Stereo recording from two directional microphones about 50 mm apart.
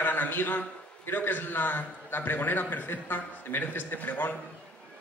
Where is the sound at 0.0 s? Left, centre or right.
Left.